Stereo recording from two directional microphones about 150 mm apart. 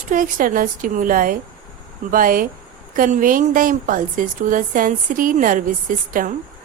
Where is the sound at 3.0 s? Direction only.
60° right (ahead or behind).